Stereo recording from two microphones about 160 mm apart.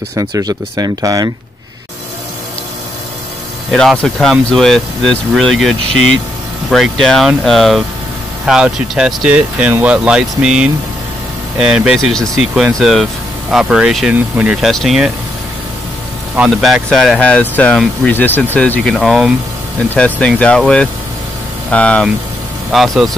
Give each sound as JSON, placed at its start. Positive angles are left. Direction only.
{"t": 0.1, "sound": "speech", "side_deg": -20}
{"t": 4.0, "sound": "speech", "side_deg": 5}
{"t": 16.3, "sound": "speech", "side_deg": -5}